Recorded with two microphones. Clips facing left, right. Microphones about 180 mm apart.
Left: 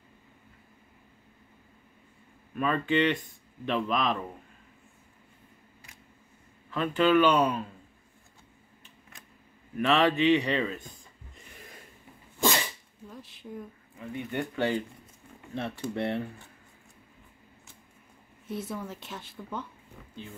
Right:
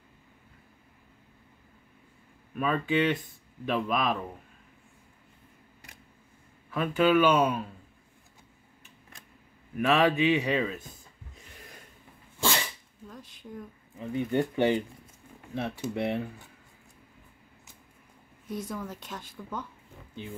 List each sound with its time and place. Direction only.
2.5 s speech: 5° right (ahead or behind)
6.7 s speech: 5° right (ahead or behind)
9.8 s speech: 10° right (ahead or behind)
13.1 s speech: 5° left (ahead or behind)
13.9 s speech: 25° right (ahead or behind)
15.5 s speech: 10° right (ahead or behind)
18.5 s speech: 5° left (ahead or behind)